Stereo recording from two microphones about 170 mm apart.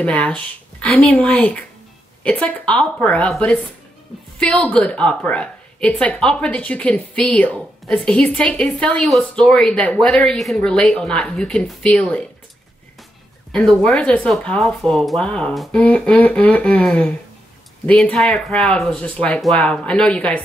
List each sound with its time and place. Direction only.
0.0 s a woman's voice: 5° left (ahead or behind)
13.5 s a woman's voice: centre (ahead or behind)